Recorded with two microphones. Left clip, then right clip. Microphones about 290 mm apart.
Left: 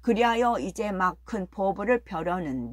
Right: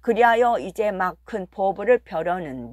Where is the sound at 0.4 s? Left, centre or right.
Right.